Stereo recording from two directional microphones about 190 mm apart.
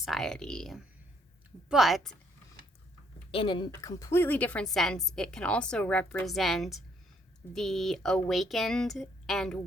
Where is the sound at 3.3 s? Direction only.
25° left (ahead or behind).